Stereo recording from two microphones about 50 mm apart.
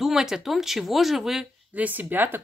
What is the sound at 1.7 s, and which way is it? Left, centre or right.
Speech, right.